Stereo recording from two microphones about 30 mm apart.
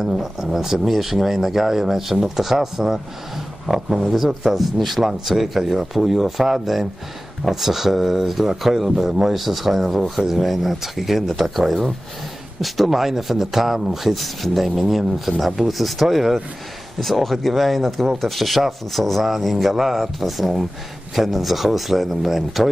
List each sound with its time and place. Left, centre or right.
0.0 s speech: centre
0.8 s speech: centre
8.9 s speech: centre
9.3 s speech: centre
19.2 s speech: centre